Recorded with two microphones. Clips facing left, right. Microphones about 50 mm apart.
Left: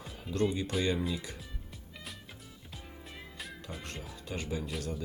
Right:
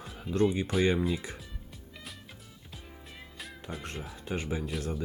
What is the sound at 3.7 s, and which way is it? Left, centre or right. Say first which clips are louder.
Speech: right 3 dB; right.